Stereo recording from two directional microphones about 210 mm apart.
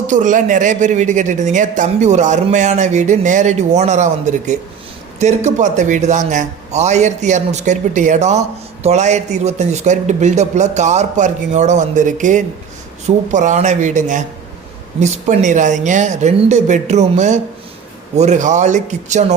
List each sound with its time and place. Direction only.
0.1 s a man's voice: 35° right (ahead or behind)